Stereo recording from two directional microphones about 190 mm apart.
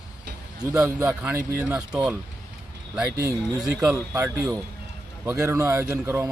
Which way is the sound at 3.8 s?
15° right (ahead or behind).